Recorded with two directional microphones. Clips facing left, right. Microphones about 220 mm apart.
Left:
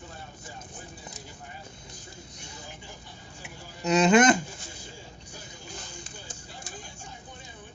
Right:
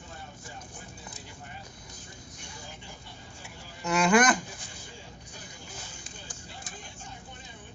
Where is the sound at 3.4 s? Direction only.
20° left (ahead or behind).